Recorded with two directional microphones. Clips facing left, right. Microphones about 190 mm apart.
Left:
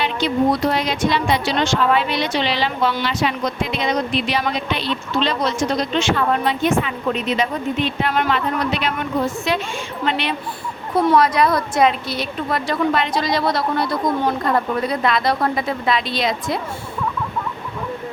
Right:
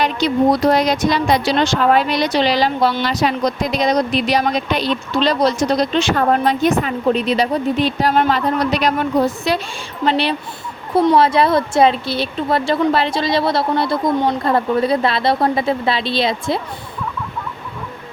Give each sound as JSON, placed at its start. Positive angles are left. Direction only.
{"t": 0.0, "sound": "a woman's voice", "side_deg": -40}